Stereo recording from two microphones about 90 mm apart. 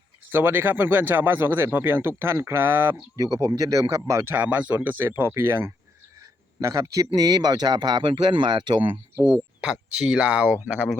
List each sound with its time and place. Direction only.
0.3 s speech: 25° right (ahead or behind)
3.2 s speech: 40° right (ahead or behind)
4.4 s speech: 20° right (ahead or behind); by 9.0 s 65° right (ahead or behind)
9.9 s speech: 10° right (ahead or behind)